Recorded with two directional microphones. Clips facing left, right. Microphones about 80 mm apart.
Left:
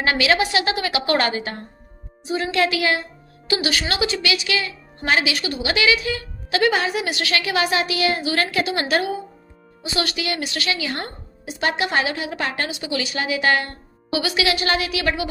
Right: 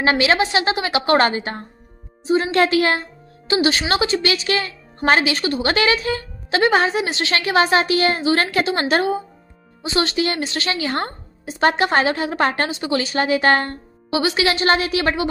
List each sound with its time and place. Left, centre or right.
0.0 s a woman's voice: right
3.4 s a woman's voice: right
14.1 s a woman's voice: right